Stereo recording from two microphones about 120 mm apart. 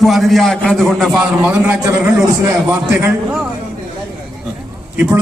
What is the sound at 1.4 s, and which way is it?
A man's voice, 10° right (ahead or behind).